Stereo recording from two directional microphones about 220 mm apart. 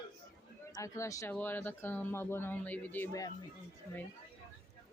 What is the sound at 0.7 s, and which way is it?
Speech, 15° left (ahead or behind).